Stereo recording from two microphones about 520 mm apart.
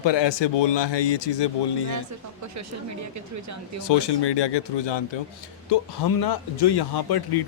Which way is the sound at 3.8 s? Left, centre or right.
Left.